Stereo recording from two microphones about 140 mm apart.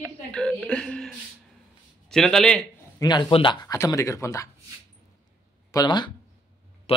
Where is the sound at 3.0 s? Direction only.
30° left (ahead or behind).